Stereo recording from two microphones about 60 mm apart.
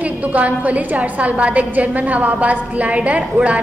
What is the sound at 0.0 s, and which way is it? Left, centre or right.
A woman's voice, right.